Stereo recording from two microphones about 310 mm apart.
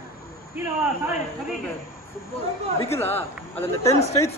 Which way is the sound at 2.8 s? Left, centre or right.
Centre.